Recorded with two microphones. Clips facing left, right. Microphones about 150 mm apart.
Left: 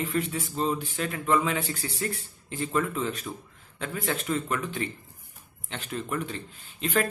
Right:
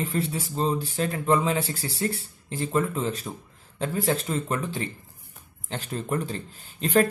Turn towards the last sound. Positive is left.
turn(degrees=-40)  # may be behind; listen again after turning